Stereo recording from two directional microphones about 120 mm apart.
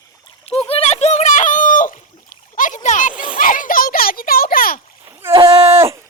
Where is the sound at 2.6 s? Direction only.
90° left.